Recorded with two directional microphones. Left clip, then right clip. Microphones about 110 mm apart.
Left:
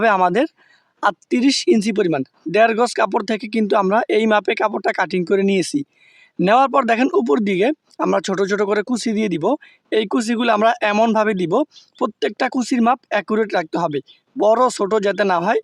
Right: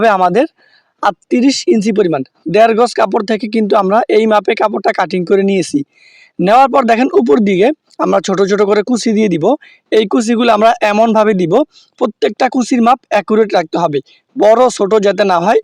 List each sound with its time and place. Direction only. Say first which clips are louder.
0.0 s speech: right 5 dB; 30° right (ahead or behind)